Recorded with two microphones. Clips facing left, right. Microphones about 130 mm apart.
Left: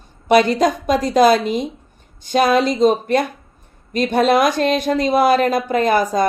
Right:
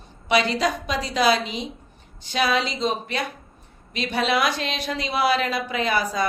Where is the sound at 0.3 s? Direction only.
50° left (ahead or behind).